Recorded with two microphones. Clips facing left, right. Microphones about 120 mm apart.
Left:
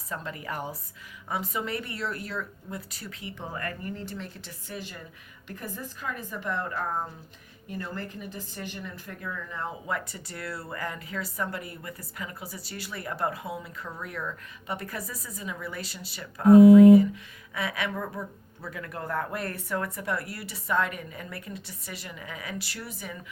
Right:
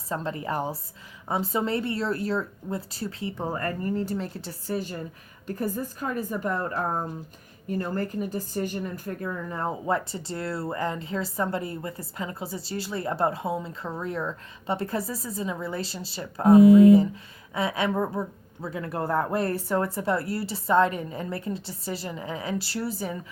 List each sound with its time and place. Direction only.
0.1 s speech: 30° right (ahead or behind)
17.5 s speech: 25° right (ahead or behind)